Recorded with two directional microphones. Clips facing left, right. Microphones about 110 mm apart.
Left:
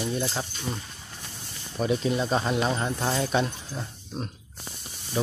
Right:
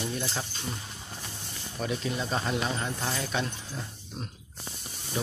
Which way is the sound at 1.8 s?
25° left (ahead or behind).